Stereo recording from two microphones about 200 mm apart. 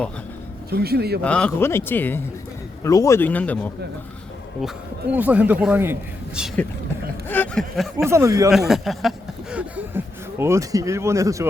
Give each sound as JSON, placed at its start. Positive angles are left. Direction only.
{"t": 0.7, "sound": "speech", "side_deg": -50}
{"t": 1.2, "sound": "speech", "side_deg": 5}
{"t": 5.1, "sound": "a man's voice", "side_deg": -5}
{"t": 7.3, "sound": "a sound", "side_deg": 5}
{"t": 8.0, "sound": "a man's voice", "side_deg": -15}
{"t": 8.4, "sound": "speech", "side_deg": 0}